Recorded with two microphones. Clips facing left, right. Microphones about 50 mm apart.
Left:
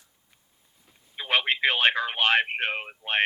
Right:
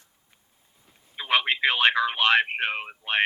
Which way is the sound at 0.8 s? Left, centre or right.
Centre.